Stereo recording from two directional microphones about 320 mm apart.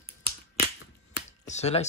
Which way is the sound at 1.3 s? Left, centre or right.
Left.